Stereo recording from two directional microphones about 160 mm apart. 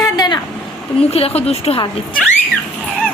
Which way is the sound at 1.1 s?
40° left (ahead or behind).